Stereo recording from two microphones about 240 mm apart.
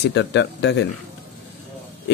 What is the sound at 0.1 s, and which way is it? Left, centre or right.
Speech, left.